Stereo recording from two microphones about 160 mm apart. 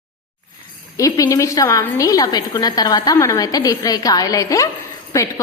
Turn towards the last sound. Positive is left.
turn(degrees=20)  # may be behind; listen again after turning